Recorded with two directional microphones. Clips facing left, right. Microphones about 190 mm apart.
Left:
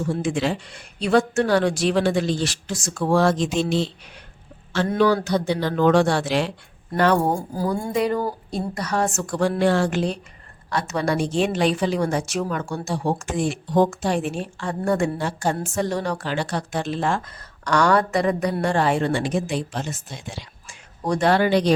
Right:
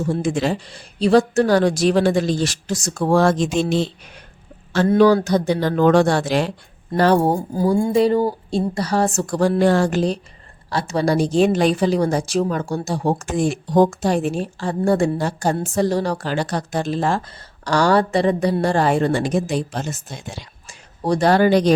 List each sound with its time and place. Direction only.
0.1 s a woman's voice: 40° right (ahead or behind)
4.9 s a woman's voice: 40° right (ahead or behind)
21.0 s a woman's voice: 35° right (ahead or behind)